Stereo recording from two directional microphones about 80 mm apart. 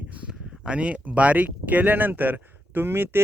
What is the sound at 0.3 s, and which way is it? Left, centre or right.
Speech, centre.